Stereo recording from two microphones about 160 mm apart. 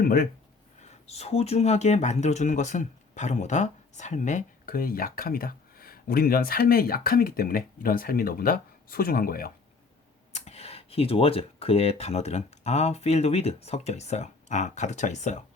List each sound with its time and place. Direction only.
0.0 s speech: 65° left (ahead or behind)
0.9 s speech: 40° left (ahead or behind); by 9.5 s 65° left (ahead or behind)
10.3 s speech: 40° left (ahead or behind)